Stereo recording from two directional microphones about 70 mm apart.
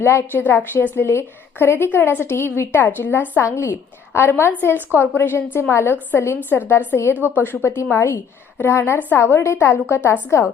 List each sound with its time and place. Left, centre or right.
0.0 s a woman's voice: left
7.1 s a woman's voice: right
7.3 s a woman's voice: left